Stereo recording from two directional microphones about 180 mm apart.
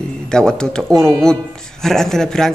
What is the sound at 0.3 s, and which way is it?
Speech, 5° left (ahead or behind).